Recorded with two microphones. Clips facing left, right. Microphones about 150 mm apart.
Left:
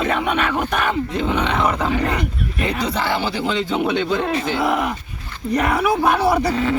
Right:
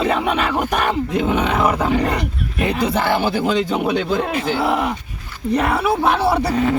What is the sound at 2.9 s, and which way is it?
Speech, 55° right (ahead or behind).